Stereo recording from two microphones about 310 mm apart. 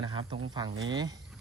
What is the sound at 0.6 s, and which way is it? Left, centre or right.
Speech, right.